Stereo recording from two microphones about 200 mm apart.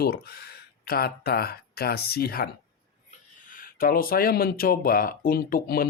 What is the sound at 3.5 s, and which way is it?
Speech, 45° left (ahead or behind).